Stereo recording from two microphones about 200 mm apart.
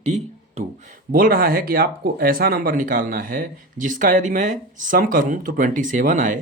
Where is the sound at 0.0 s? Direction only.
35° right (ahead or behind).